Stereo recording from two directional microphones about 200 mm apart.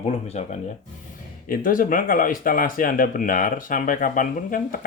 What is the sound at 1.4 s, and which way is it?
Speech, 45° left (ahead or behind).